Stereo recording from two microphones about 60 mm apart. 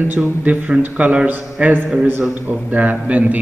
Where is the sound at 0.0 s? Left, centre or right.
Right.